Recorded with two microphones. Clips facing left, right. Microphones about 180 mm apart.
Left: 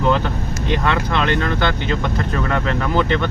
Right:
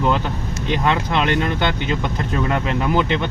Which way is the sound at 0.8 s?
15° right (ahead or behind).